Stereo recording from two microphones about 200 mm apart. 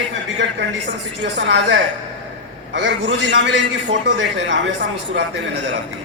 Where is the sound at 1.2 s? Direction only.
65° right (ahead or behind).